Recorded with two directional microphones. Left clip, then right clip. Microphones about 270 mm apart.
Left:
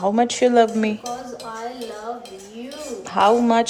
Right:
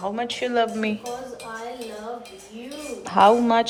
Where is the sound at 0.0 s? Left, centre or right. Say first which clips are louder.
Left 9 dB; centre.